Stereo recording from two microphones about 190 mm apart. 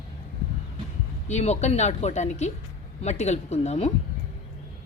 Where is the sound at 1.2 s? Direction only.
35° left (ahead or behind).